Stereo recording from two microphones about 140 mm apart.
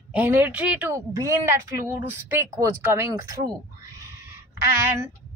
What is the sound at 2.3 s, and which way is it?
Speech, 15° right (ahead or behind).